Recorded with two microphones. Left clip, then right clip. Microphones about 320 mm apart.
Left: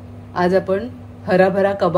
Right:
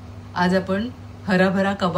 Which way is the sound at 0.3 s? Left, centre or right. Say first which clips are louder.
Left 4 dB; centre.